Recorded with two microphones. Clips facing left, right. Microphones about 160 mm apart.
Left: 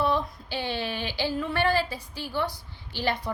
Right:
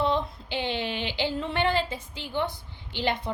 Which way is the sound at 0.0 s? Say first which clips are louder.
Even; 20° right (ahead or behind).